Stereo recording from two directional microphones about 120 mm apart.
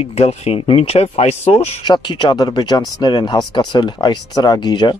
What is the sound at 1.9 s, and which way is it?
Speech, 40° left (ahead or behind).